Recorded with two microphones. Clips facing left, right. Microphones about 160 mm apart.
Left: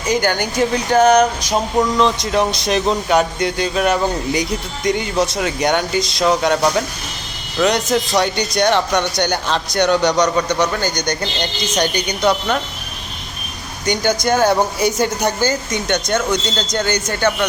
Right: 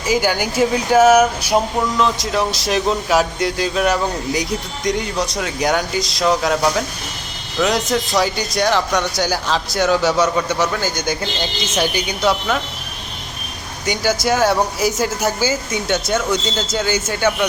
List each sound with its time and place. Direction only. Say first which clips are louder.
0.1 s speech: even; 5° right (ahead or behind)
13.8 s speech: left 1 dB; 5° right (ahead or behind)